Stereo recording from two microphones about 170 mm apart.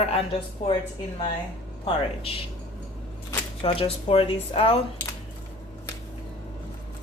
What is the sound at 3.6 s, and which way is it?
Speech, 35° left (ahead or behind).